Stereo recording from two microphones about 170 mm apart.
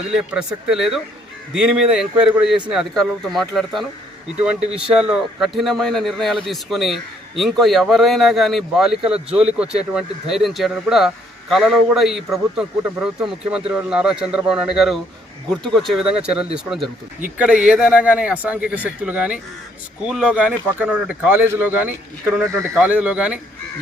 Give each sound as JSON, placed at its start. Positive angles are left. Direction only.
{"t": 0.1, "sound": "speech", "side_deg": -5}
{"t": 9.0, "sound": "a man's voice", "side_deg": -35}
{"t": 9.6, "sound": "speech", "side_deg": -5}